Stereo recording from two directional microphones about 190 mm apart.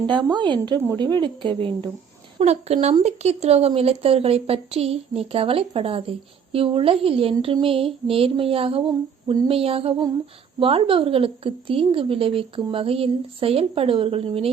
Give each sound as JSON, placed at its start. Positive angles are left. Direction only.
{"t": 0.1, "sound": "a woman's voice", "side_deg": -20}